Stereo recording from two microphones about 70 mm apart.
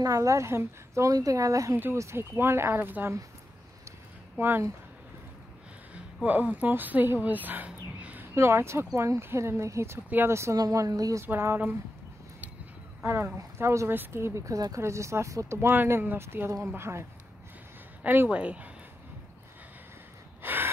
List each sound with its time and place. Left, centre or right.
0.0 s speech: right
1.1 s speech: right
2.0 s speech: right
4.4 s speech: right
6.2 s a woman's voice: right
8.4 s speech: right
10.0 s speech: right
10.5 s a woman's voice: right
11.2 s speech: right
13.0 s speech: right
15.7 s speech: right
18.0 s speech: right
18.3 s speech: centre
20.4 s gasp: right